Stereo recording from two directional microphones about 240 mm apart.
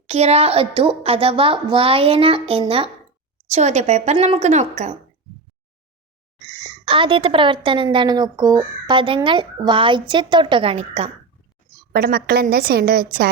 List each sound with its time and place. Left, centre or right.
0.1 s a woman's voice: right
6.8 s a woman's voice: right
11.9 s a woman's voice: right